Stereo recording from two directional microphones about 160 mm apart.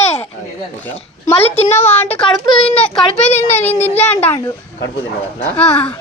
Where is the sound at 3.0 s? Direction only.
45° left (ahead or behind).